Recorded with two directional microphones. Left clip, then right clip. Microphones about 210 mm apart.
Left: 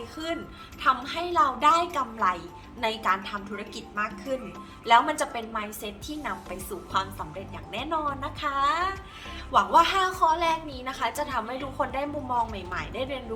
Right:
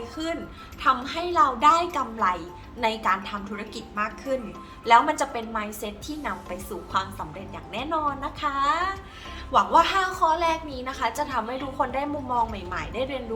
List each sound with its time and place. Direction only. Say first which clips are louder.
0.2 s a woman's voice: right 1 dB; 5° left (ahead or behind)